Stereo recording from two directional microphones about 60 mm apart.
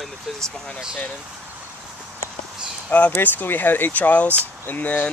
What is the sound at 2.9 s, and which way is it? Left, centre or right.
Speech, left.